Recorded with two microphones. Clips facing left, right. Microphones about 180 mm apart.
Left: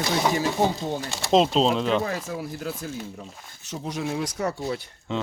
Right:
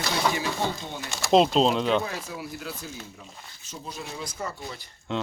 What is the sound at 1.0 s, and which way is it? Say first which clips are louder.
Speech: left 3 dB; 35° left (ahead or behind).